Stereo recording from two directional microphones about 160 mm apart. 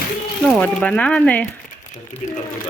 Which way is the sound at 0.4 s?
5° left (ahead or behind).